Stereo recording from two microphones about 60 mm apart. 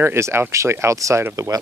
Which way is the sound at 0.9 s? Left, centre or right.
Right.